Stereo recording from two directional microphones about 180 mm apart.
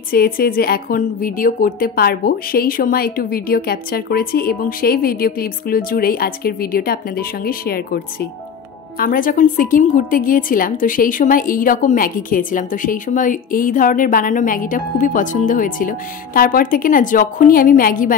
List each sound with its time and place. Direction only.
0.1 s a woman's voice: 55° left (ahead or behind)